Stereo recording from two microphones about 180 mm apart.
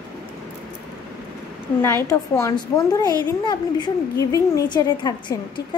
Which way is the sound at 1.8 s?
15° left (ahead or behind).